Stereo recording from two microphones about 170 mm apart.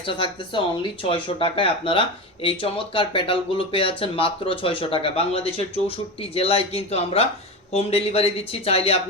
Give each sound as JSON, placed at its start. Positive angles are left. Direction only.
{"t": 0.0, "sound": "speech", "side_deg": 30}